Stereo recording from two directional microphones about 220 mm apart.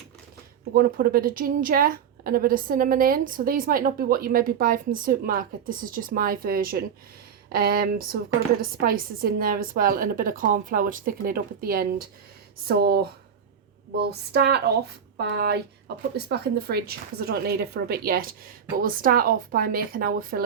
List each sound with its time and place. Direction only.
0.7 s a woman's voice: 45° right (ahead or behind)